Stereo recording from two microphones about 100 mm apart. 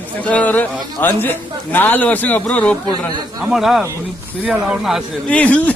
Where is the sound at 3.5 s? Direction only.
Centre (ahead or behind).